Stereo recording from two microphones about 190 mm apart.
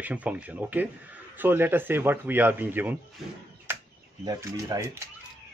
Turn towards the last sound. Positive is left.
turn(degrees=-15)  # may be behind; listen again after turning